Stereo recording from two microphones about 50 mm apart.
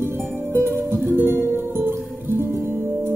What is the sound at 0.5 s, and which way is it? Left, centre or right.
Music, right.